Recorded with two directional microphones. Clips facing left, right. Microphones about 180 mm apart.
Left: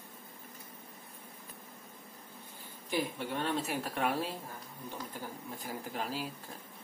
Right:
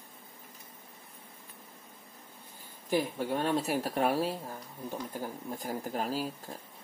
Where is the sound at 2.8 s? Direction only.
40° right (ahead or behind).